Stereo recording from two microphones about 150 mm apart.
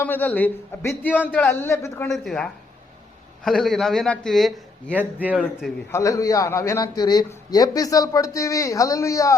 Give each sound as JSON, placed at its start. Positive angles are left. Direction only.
{"t": 0.0, "sound": "a man's voice", "side_deg": 10}
{"t": 2.0, "sound": "a man's voice", "side_deg": 0}
{"t": 4.9, "sound": "speech", "side_deg": -10}
{"t": 5.4, "sound": "a man's voice", "side_deg": 0}
{"t": 5.9, "sound": "a man's voice", "side_deg": 20}